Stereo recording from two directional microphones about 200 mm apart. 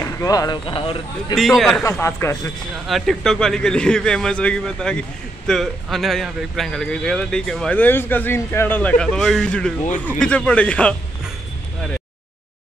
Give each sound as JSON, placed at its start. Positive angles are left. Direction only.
{"t": 0.0, "sound": "speech", "side_deg": 15}
{"t": 1.6, "sound": "speech", "side_deg": 0}
{"t": 1.9, "sound": "speech", "side_deg": 15}
{"t": 2.9, "sound": "speech", "side_deg": 0}